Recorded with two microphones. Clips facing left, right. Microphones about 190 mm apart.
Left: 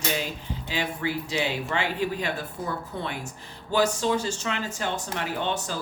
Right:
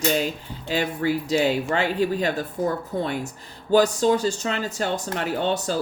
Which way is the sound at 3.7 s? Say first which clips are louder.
Right 6 dB; 40° right (ahead or behind).